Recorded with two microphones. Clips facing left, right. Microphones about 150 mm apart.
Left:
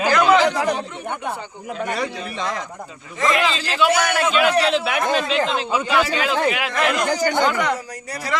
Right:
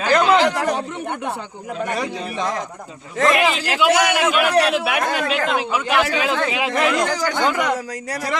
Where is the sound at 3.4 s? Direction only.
15° right (ahead or behind).